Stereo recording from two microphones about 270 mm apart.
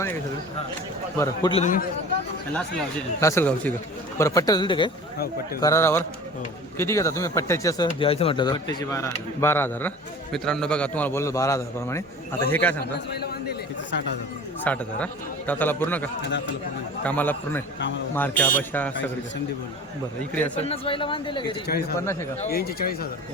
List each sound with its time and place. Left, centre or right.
1.2 s speech: centre
2.5 s a man's voice: centre
12.8 s a man's voice: left
14.6 s a man's voice: centre
20.6 s speech: left
21.7 s a man's voice: left